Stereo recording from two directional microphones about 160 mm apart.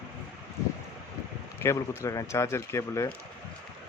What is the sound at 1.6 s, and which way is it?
Speech, 15° left (ahead or behind).